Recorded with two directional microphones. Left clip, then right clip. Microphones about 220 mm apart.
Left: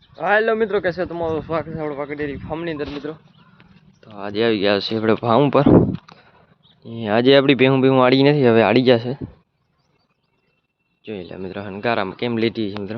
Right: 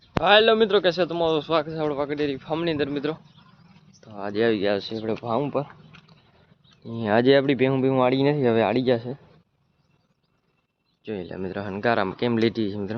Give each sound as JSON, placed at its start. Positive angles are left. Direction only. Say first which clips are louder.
{"t": 0.2, "sound": "a man's voice", "louder": "even", "side_deg": -10}
{"t": 2.7, "sound": "speech", "louder": "right 2 dB", "side_deg": -45}
{"t": 4.0, "sound": "speech", "louder": "left 3 dB", "side_deg": 5}
{"t": 6.8, "sound": "speech", "louder": "left 3 dB", "side_deg": 5}
{"t": 11.0, "sound": "speech", "louder": "left 1 dB", "side_deg": 0}